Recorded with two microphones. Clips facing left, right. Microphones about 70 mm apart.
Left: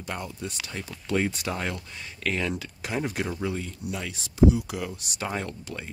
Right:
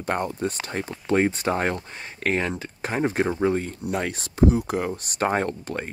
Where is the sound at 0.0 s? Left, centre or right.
Right.